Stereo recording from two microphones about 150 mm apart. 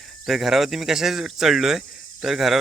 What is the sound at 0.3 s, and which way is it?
A man's voice, centre (ahead or behind).